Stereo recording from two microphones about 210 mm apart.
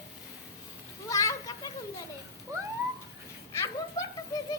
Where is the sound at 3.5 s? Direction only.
15° left (ahead or behind).